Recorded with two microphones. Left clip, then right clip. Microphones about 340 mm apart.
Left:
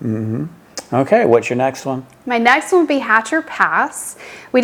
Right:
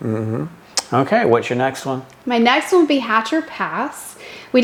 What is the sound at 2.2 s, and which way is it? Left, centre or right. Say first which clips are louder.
A woman's voice: left 2 dB; left.